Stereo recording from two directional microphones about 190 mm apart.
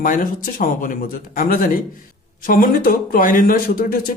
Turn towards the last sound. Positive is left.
turn(degrees=50)  # may be behind; listen again after turning